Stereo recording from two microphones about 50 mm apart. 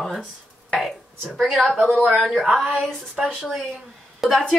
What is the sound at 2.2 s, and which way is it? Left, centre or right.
Speech, centre.